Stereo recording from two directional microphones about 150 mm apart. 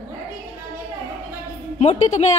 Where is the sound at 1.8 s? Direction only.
45° left (ahead or behind).